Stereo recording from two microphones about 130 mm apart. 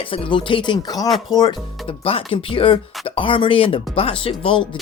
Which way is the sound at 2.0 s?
45° left (ahead or behind).